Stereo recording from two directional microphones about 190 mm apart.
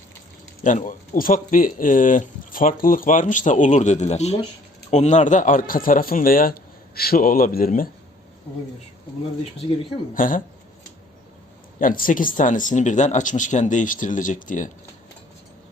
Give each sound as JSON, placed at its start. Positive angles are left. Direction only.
{"t": 0.6, "sound": "speech", "side_deg": 45}
{"t": 10.2, "sound": "speech", "side_deg": 45}
{"t": 11.8, "sound": "speech", "side_deg": 45}